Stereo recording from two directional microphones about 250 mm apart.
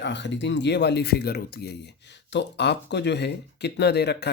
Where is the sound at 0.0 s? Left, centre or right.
Left.